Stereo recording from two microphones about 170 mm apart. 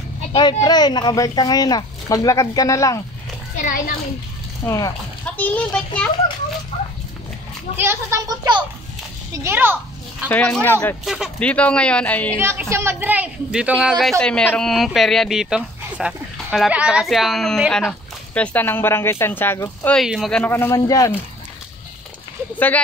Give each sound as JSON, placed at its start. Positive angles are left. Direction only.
{"t": 0.3, "sound": "speech", "side_deg": 30}
{"t": 3.6, "sound": "a child's voice", "side_deg": 55}
{"t": 4.6, "sound": "speech", "side_deg": 20}
{"t": 5.2, "sound": "speech", "side_deg": 10}
{"t": 7.7, "sound": "a child's voice", "side_deg": -15}
{"t": 10.3, "sound": "speech", "side_deg": 10}
{"t": 12.4, "sound": "speech", "side_deg": -15}
{"t": 20.0, "sound": "speech", "side_deg": 0}
{"t": 20.5, "sound": "speech", "side_deg": 20}